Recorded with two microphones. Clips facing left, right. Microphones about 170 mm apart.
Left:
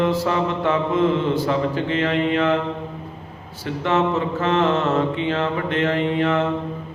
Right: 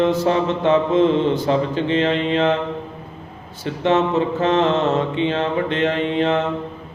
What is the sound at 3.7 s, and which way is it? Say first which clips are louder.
Mantra: right 2 dB; 25° right (ahead or behind).